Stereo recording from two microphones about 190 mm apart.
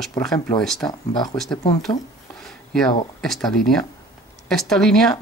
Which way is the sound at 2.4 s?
Centre (ahead or behind).